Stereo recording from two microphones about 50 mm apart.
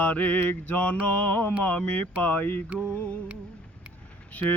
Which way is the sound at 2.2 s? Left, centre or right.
Left.